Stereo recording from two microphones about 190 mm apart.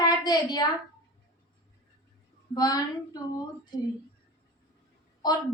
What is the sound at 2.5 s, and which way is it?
Speech, 20° left (ahead or behind).